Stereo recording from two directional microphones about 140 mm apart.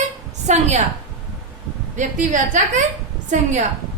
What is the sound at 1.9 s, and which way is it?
Speech, 60° right (ahead or behind).